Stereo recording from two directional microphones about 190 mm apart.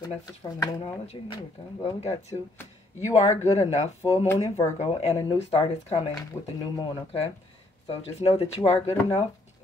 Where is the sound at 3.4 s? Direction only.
35° left (ahead or behind).